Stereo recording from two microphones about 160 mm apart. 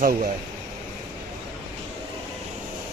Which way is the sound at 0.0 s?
60° right (ahead or behind).